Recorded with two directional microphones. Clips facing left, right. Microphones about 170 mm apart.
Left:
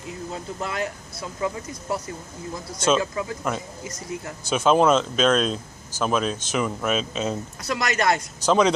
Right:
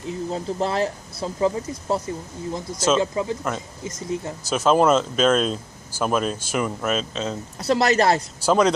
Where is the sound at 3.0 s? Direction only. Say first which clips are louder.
Right 3 dB; 25° right (ahead or behind).